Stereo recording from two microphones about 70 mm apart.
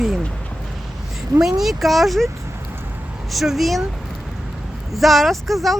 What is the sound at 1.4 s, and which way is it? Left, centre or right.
Speech, centre.